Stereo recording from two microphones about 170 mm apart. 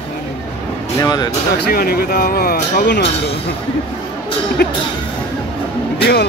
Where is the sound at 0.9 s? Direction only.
20° left (ahead or behind).